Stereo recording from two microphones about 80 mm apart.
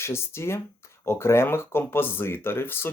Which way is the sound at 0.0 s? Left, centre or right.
Left.